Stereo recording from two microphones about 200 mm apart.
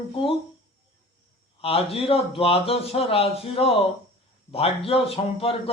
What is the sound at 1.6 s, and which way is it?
A man's voice, 30° left (ahead or behind).